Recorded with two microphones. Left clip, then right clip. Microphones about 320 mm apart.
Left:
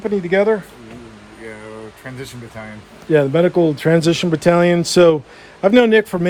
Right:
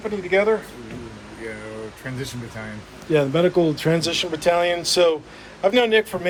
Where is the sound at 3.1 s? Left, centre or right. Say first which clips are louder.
Left 4 dB; left.